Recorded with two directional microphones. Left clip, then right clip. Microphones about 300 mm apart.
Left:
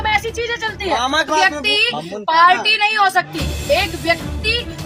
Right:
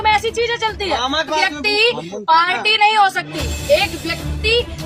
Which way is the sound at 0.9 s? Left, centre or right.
Left.